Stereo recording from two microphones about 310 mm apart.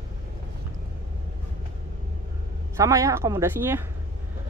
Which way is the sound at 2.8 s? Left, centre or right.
Centre.